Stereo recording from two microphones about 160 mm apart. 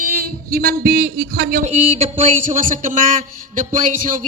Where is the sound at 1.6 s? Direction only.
45° right (ahead or behind).